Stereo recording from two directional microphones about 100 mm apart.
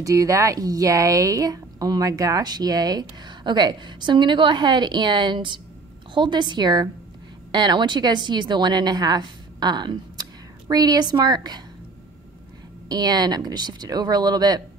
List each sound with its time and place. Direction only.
0.0 s a woman's voice: 35° right (ahead or behind)
12.8 s a woman's voice: 40° right (ahead or behind)